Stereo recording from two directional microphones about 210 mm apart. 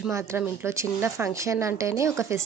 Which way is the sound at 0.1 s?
10° right (ahead or behind).